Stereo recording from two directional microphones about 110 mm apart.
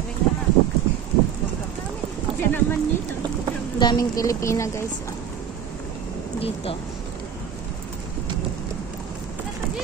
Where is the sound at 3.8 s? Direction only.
35° left (ahead or behind).